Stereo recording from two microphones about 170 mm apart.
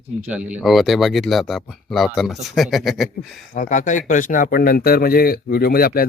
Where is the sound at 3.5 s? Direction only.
50° left (ahead or behind).